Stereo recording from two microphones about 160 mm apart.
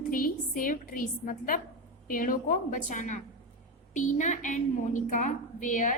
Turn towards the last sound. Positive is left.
turn(degrees=55)  # may be behind; listen again after turning